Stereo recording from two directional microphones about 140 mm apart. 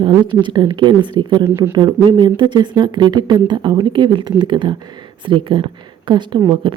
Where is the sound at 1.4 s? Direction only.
20° right (ahead or behind).